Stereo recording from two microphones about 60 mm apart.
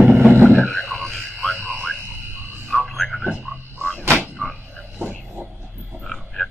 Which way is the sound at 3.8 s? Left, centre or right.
Left.